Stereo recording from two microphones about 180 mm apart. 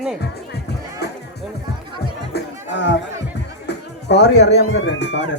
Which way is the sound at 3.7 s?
70° left (ahead or behind).